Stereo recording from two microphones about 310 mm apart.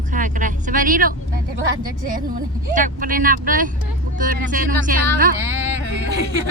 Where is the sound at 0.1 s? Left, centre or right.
Right.